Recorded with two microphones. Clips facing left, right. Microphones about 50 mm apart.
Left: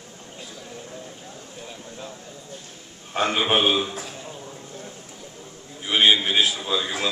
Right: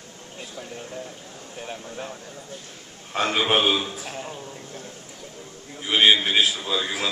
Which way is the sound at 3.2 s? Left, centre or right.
Left.